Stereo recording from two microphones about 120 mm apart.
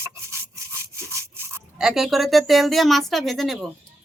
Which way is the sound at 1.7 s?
5° right (ahead or behind).